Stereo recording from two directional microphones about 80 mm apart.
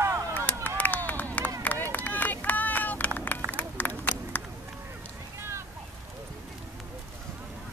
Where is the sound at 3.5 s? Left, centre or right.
Left.